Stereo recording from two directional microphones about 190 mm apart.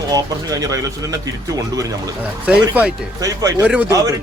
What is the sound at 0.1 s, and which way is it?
A man's voice, 20° right (ahead or behind).